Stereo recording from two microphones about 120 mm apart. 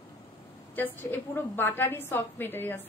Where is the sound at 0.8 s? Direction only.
15° left (ahead or behind).